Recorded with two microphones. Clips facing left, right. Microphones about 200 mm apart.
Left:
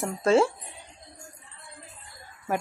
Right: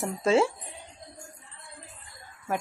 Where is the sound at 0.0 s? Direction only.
Centre (ahead or behind).